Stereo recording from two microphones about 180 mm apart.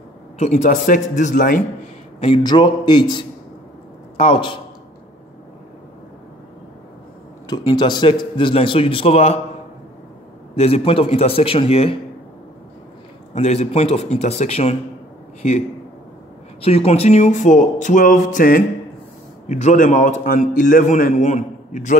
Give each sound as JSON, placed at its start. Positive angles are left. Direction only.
{"t": 0.4, "sound": "a man's voice", "side_deg": 40}
{"t": 2.1, "sound": "a man's voice", "side_deg": 30}
{"t": 7.4, "sound": "a man's voice", "side_deg": 25}
{"t": 10.5, "sound": "a man's voice", "side_deg": 35}
{"t": 13.3, "sound": "a man's voice", "side_deg": 40}
{"t": 16.6, "sound": "a man's voice", "side_deg": 35}